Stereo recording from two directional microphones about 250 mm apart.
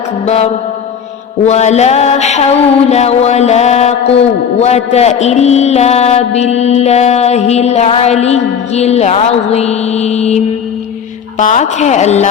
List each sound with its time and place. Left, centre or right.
0.3 s mantra: left